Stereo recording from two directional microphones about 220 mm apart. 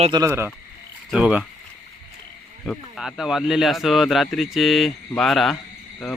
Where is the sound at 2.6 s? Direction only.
Centre (ahead or behind).